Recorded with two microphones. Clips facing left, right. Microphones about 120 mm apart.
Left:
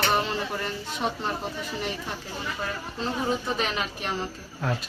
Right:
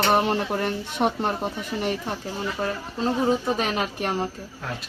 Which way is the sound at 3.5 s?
45° right (ahead or behind).